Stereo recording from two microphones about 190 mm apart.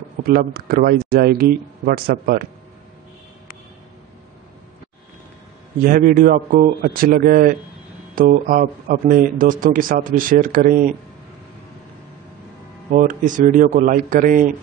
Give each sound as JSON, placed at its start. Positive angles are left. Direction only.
{"t": 0.2, "sound": "speech", "side_deg": -50}
{"t": 5.9, "sound": "speech", "side_deg": -45}
{"t": 12.9, "sound": "speech", "side_deg": -45}